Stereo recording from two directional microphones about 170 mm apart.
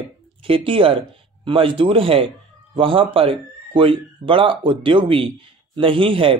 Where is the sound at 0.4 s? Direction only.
30° right (ahead or behind).